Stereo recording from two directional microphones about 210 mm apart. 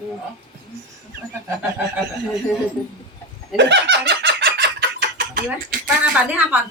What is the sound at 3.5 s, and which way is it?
Fowl, 60° right (ahead or behind).